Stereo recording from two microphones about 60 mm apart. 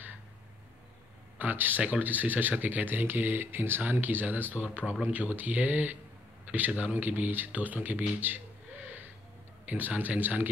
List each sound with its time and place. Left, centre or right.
1.4 s speech: right
9.7 s speech: right